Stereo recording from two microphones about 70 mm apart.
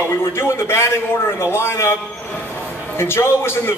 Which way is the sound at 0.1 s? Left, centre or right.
Left.